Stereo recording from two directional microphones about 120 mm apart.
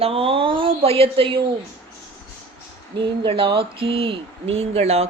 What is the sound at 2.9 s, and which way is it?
A woman's voice, 45° right (ahead or behind).